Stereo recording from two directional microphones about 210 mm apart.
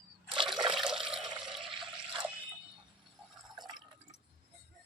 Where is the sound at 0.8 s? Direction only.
Centre (ahead or behind).